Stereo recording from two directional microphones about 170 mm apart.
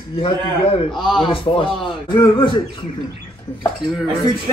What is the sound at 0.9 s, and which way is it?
Speech, 5° left (ahead or behind).